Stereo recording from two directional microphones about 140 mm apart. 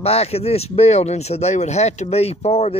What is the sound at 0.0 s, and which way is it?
Speech, 45° left (ahead or behind).